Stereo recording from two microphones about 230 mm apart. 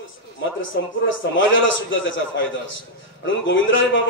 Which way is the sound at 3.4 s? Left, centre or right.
Left.